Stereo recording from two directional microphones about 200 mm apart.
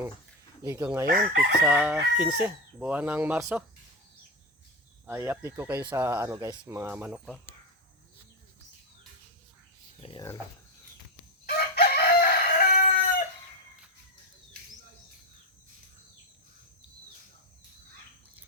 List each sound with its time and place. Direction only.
0.6 s chicken: 10° right (ahead or behind)
1.0 s chicken: 45° right (ahead or behind)
1.6 s chicken: 10° right (ahead or behind)
5.0 s chicken: 10° right (ahead or behind)
10.0 s speech: 25° left (ahead or behind)
11.4 s chicken: 50° left (ahead or behind)